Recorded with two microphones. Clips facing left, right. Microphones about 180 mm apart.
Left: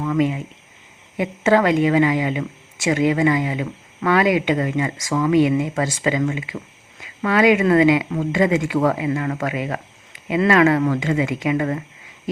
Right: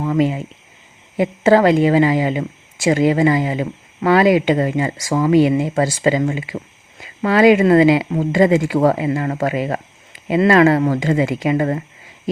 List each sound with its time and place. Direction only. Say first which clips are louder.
0.0 s speech: right 2 dB; 35° right (ahead or behind)